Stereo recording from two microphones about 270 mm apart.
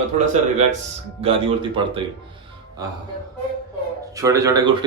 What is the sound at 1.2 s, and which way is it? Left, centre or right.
Speech, right.